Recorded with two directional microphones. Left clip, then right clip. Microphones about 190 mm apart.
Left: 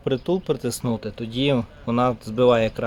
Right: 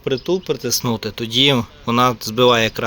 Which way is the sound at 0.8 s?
5° right (ahead or behind).